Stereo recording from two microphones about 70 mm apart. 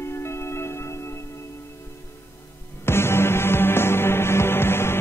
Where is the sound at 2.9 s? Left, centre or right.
Left.